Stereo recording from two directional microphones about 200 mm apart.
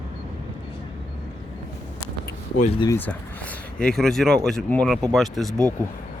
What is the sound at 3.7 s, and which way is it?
Speech, 5° left (ahead or behind).